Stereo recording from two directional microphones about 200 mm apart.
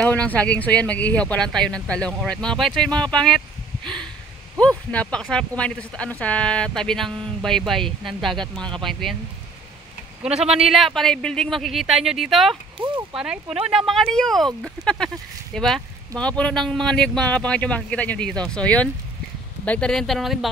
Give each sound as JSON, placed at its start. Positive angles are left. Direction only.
{"t": 0.0, "sound": "speech", "side_deg": 5}
{"t": 10.2, "sound": "speech", "side_deg": -5}
{"t": 12.7, "sound": "a sound", "side_deg": -25}
{"t": 13.1, "sound": "speech", "side_deg": -5}